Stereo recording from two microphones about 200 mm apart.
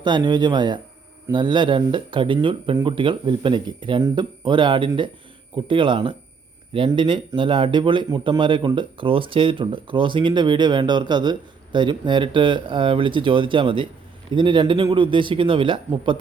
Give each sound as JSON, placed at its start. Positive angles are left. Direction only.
{"t": 0.0, "sound": "a man's voice", "side_deg": -20}